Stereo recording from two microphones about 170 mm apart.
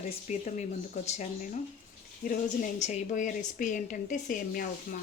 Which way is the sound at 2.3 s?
50° left (ahead or behind).